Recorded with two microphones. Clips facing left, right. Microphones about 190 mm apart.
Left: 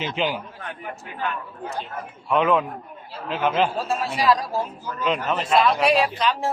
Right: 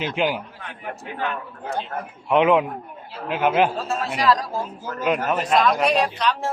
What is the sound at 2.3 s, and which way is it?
Speech, 15° right (ahead or behind).